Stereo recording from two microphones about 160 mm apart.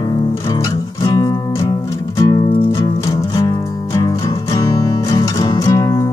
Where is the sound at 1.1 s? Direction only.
25° left (ahead or behind).